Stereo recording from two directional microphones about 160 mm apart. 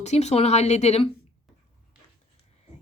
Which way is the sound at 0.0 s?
45° left (ahead or behind).